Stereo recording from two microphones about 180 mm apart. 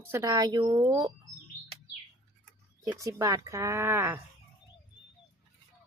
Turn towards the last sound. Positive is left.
turn(degrees=-15)  # may be behind; listen again after turning